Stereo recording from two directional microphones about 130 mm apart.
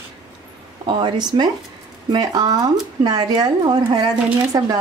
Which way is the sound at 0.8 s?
35° right (ahead or behind).